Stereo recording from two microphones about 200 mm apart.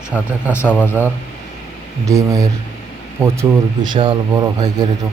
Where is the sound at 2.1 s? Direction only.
15° right (ahead or behind).